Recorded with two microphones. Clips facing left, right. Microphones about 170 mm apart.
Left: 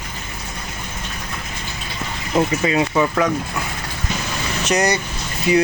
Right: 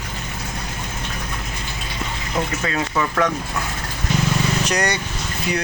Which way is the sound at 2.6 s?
15° left (ahead or behind).